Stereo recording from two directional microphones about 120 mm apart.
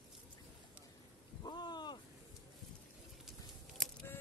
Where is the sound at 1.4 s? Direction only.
35° left (ahead or behind).